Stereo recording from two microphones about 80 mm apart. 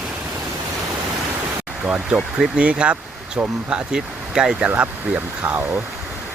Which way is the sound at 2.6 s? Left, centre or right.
Centre.